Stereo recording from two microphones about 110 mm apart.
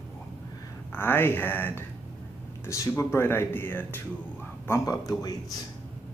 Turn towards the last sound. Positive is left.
turn(degrees=30)  # may be behind; listen again after turning